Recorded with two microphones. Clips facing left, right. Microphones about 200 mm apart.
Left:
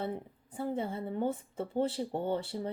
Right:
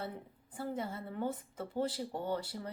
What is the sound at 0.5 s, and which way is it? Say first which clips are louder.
A woman's voice: left 4 dB; 25° left (ahead or behind).